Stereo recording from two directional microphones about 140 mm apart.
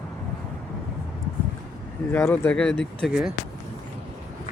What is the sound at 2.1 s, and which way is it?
Speech, 15° left (ahead or behind).